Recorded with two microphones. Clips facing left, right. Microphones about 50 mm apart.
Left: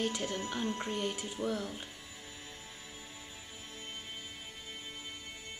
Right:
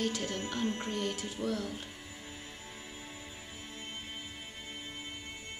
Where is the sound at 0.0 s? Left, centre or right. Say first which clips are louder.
Even; centre.